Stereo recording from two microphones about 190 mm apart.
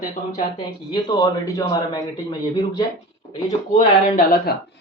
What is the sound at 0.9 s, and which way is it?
A man's voice, 20° left (ahead or behind).